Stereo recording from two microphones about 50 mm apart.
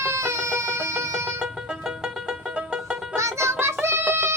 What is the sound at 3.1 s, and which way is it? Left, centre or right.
Music, right.